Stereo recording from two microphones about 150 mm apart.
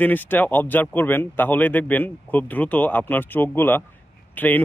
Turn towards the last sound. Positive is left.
turn(degrees=10)  # may be behind; listen again after turning